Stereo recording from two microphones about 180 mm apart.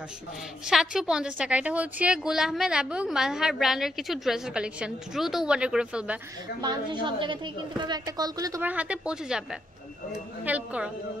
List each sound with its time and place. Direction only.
0.7 s a woman's voice: 5° right (ahead or behind)
6.6 s a woman's voice: 25° right (ahead or behind); by 10.9 s 10° right (ahead or behind)